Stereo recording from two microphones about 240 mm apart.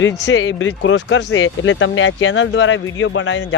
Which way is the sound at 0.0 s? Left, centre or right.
Left.